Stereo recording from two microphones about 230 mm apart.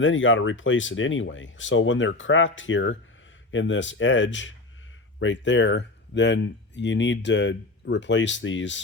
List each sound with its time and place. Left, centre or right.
0.0 s speech: left